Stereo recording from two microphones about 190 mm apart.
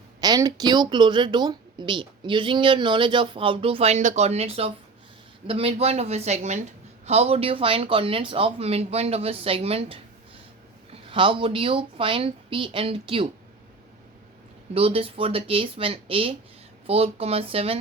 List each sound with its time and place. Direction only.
0.2 s speech: 20° right (ahead or behind)
11.0 s speech: 25° right (ahead or behind)
14.7 s speech: 30° right (ahead or behind)